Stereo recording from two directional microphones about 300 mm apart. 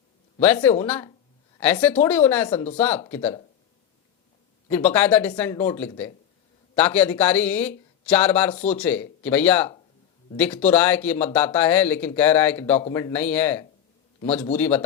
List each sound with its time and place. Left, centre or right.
0.4 s a woman's voice: centre
2.5 s speech: left
2.7 s speech: centre
3.2 s speech: centre
4.7 s speech: centre